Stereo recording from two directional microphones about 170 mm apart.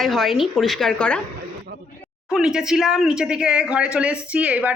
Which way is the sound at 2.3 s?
Centre (ahead or behind).